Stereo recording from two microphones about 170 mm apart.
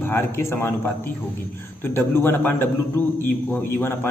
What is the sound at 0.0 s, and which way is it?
A man's voice, 15° left (ahead or behind).